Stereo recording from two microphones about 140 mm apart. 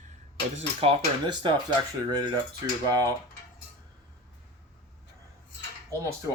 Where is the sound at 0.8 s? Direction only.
45° right (ahead or behind).